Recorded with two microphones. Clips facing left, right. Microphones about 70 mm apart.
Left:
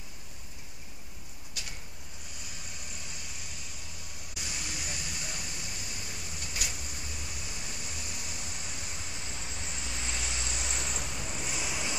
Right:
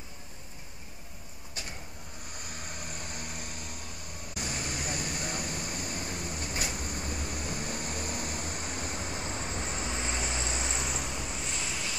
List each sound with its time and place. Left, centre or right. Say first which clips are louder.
2.3 s vehicle: right 5 dB; right
10.8 s vehicle: right 3 dB; centre